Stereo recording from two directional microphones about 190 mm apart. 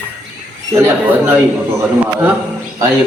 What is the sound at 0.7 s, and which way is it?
Speech, 15° right (ahead or behind).